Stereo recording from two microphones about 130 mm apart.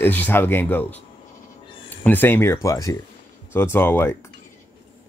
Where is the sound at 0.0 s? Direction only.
15° left (ahead or behind).